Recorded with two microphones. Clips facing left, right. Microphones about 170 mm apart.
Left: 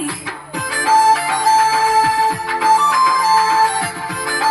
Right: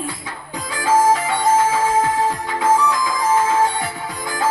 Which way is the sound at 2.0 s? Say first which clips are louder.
Left 2 dB; 75° left (ahead or behind).